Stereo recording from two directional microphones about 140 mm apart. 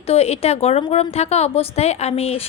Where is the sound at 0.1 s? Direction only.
50° left (ahead or behind).